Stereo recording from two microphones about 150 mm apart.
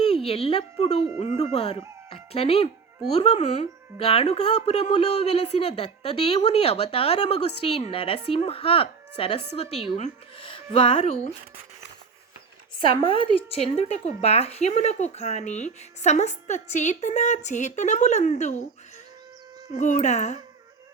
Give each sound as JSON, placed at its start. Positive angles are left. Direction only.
{"t": 0.0, "sound": "speech", "side_deg": 40}
{"t": 12.8, "sound": "speech", "side_deg": 35}
{"t": 19.7, "sound": "speech", "side_deg": 55}